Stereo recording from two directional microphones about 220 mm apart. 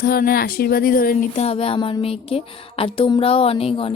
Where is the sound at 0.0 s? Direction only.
40° left (ahead or behind).